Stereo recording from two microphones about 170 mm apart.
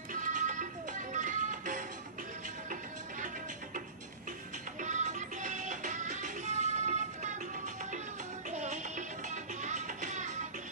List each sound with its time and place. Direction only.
0.1 s music: 50° right (ahead or behind)
4.7 s music: 45° right (ahead or behind)
8.5 s music: 45° right (ahead or behind)